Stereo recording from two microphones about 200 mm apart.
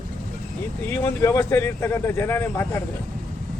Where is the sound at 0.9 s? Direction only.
10° left (ahead or behind).